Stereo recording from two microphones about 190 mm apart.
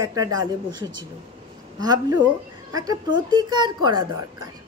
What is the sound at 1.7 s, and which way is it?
A woman's voice, 20° right (ahead or behind).